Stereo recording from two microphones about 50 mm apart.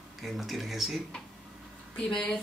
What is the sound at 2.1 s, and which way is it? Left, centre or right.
Speech, left.